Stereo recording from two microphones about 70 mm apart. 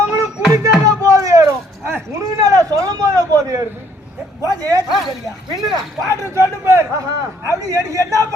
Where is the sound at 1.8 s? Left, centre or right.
Right.